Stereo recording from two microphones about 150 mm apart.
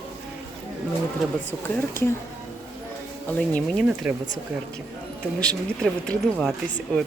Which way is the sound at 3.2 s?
10° left (ahead or behind).